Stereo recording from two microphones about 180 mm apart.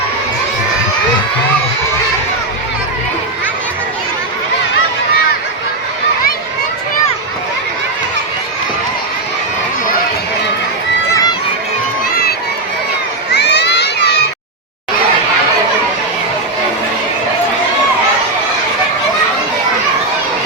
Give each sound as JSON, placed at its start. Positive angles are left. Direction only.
{"t": 11.1, "sound": "run", "side_deg": 20}
{"t": 13.3, "sound": "crowd", "side_deg": 70}